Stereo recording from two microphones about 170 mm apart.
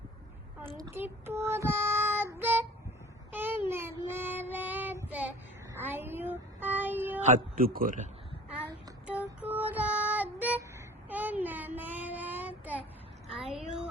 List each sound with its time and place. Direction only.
0.8 s child singing: 15° right (ahead or behind)
5.7 s a sound: 15° right (ahead or behind)
7.3 s speech: 60° right (ahead or behind)
9.4 s female singing: 10° right (ahead or behind)
11.1 s child singing: 10° right (ahead or behind)
13.4 s a sound: 5° right (ahead or behind)